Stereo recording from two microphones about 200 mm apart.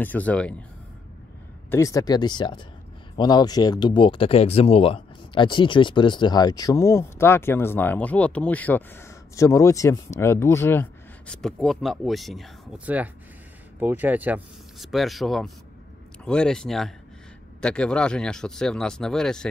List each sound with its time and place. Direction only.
0.0 s speech: 10° left (ahead or behind)
1.7 s speech: 15° left (ahead or behind)